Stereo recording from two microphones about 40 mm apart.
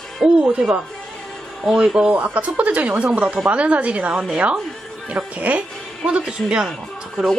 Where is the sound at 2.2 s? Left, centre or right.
Right.